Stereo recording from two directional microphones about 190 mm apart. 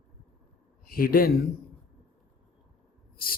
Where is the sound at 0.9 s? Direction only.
50° left (ahead or behind).